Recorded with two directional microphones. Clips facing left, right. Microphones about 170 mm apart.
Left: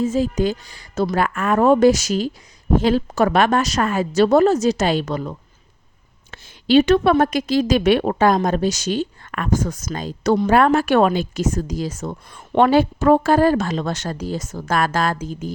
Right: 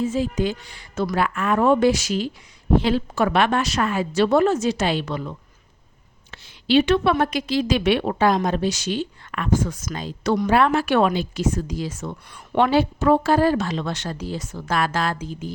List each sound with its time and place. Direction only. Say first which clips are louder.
0.0 s a woman's voice: left 3 dB; 40° left (ahead or behind)
6.3 s speech: left 4 dB; 45° left (ahead or behind)